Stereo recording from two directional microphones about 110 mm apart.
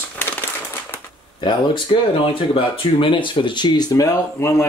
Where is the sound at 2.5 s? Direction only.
50° left (ahead or behind).